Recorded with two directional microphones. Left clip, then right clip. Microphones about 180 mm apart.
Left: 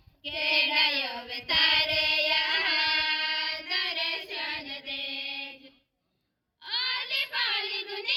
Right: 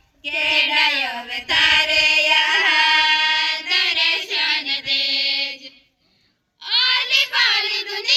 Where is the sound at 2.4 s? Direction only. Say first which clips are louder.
Right 10 dB; 85° left.